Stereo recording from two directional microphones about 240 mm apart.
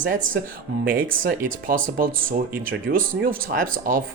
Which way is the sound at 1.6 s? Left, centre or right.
Right.